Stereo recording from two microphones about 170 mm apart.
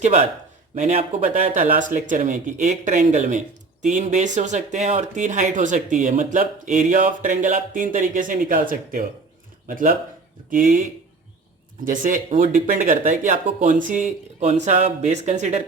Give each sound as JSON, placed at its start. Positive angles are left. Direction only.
{"t": 0.0, "sound": "speech", "side_deg": -45}
{"t": 11.9, "sound": "speech", "side_deg": -50}